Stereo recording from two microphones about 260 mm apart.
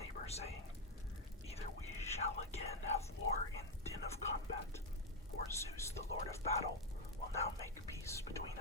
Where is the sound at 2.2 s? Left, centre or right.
Left.